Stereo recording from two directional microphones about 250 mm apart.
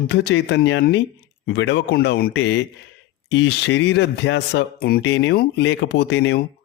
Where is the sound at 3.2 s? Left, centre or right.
Left.